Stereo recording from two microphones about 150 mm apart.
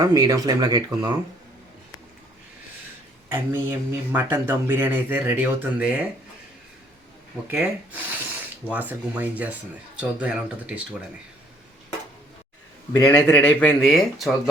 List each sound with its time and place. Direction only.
0.0 s speech: 25° right (ahead or behind)
3.2 s speech: 15° right (ahead or behind)
7.5 s speech: 10° right (ahead or behind)
12.9 s speech: 15° left (ahead or behind)